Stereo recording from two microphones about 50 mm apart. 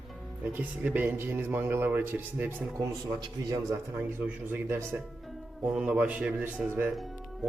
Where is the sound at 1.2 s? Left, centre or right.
Right.